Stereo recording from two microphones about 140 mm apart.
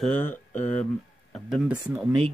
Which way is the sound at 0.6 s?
60° left (ahead or behind).